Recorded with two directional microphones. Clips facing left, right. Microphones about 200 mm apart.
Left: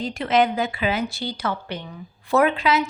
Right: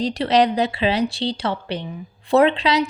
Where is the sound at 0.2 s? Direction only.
35° right (ahead or behind).